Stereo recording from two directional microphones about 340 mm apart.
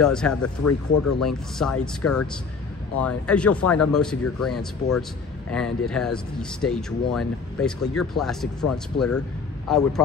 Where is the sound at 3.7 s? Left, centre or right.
Left.